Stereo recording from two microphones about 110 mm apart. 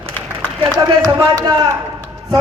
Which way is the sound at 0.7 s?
35° right (ahead or behind).